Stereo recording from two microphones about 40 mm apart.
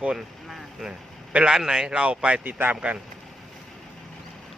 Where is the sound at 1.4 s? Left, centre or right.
Centre.